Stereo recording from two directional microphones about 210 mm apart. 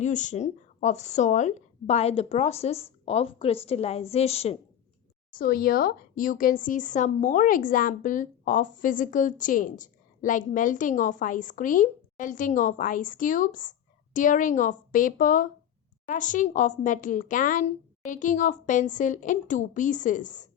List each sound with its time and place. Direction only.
0.0 s a woman's voice: 35° left (ahead or behind)
5.4 s speech: 45° left (ahead or behind)